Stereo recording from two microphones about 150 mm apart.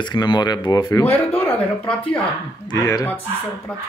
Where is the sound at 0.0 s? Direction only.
30° left (ahead or behind).